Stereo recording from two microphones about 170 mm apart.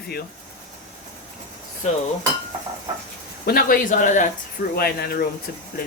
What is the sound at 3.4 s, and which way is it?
Speech, 60° left (ahead or behind).